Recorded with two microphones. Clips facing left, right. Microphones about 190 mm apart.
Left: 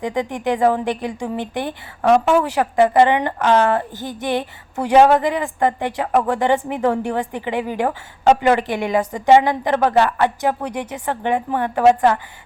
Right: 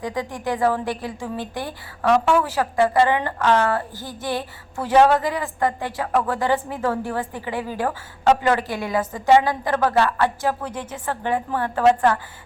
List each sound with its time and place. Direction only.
0.0 s speech: 20° left (ahead or behind)